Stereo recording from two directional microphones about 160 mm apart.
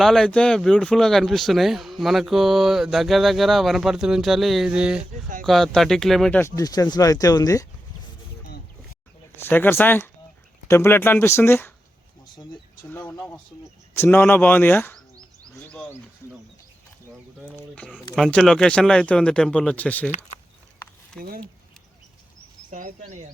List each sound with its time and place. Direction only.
0.0 s speech: 5° left (ahead or behind)
6.4 s speech: 25° left (ahead or behind)
9.3 s speech: 15° left (ahead or behind)
12.9 s speech: 10° left (ahead or behind)
17.9 s speech: centre (ahead or behind)
21.2 s speech: 65° right (ahead or behind)
22.7 s a sound: 55° right (ahead or behind)